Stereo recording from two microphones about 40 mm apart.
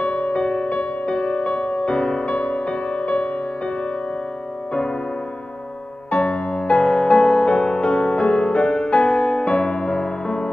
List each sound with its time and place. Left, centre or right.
0.0 s music: left
1.9 s music: centre
2.2 s music: left
6.0 s music: left